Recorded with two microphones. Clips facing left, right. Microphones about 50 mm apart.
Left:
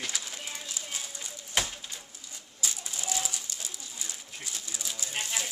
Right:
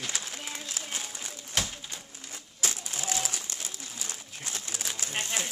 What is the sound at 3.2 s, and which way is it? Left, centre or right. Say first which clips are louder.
Bird: right 2 dB; right.